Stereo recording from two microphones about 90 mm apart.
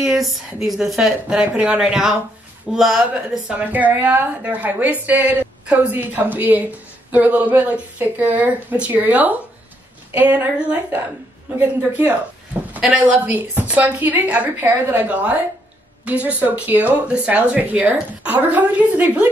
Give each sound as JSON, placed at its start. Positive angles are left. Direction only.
{"t": 0.0, "sound": "a woman's voice", "side_deg": -5}
{"t": 1.4, "sound": "a woman's voice", "side_deg": -15}
{"t": 3.4, "sound": "speech", "side_deg": -15}